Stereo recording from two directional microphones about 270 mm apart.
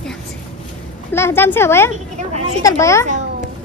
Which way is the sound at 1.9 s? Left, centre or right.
Right.